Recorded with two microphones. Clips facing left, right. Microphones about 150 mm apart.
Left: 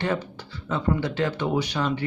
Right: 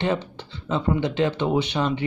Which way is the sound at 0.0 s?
25° right (ahead or behind).